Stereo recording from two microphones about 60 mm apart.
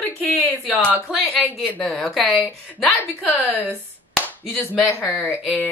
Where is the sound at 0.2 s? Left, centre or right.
Left.